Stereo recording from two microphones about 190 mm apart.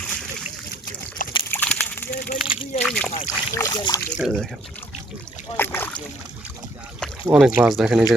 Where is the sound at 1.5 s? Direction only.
10° left (ahead or behind).